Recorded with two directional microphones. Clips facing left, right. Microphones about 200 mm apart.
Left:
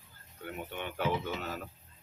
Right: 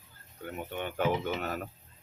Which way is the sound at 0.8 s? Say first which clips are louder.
Right 3 dB; 50° right (ahead or behind).